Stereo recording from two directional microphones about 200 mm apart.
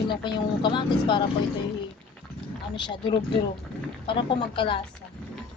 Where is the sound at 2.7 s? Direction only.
25° left (ahead or behind).